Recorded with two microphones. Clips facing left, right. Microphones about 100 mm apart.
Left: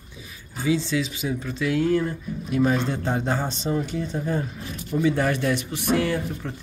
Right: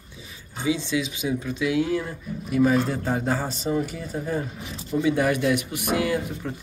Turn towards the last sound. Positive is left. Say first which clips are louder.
# even
turn(degrees=-10)  # may be behind; listen again after turning